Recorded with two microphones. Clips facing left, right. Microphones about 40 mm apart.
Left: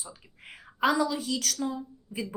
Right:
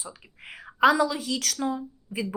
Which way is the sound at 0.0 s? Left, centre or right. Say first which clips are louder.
Right 4 dB; right.